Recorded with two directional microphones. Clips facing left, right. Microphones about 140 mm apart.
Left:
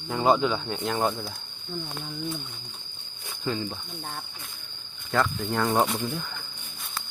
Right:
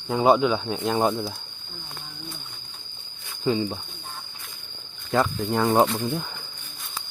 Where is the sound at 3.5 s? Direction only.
20° right (ahead or behind).